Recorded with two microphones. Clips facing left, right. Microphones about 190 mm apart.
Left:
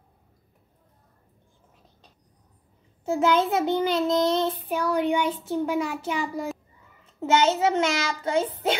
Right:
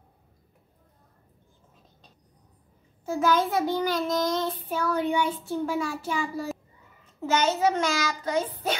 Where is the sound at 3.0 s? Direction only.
25° left (ahead or behind).